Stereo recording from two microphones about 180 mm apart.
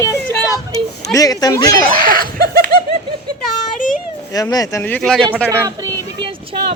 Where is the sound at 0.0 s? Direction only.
15° left (ahead or behind).